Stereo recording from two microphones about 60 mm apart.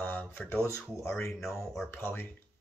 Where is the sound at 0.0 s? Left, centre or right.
Left.